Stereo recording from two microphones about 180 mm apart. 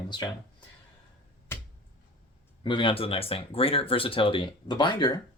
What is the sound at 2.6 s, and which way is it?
Speech, 25° left (ahead or behind).